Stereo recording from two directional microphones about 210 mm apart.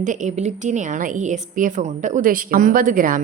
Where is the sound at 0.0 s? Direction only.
35° right (ahead or behind).